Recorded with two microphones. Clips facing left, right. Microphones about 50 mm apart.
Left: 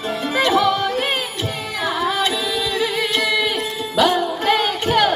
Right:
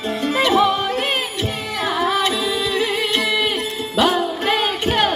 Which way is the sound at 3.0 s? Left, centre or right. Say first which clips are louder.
Even; centre.